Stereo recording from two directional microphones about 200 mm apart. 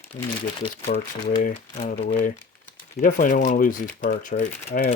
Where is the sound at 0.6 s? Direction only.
25° left (ahead or behind).